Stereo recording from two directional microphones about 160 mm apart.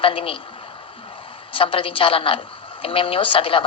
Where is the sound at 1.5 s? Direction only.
35° left (ahead or behind).